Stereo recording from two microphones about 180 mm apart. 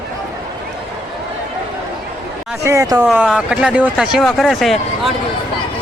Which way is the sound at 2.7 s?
20° right (ahead or behind).